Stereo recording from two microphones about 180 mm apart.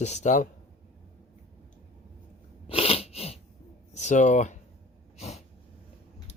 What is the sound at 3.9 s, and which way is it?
Speech, 40° left (ahead or behind).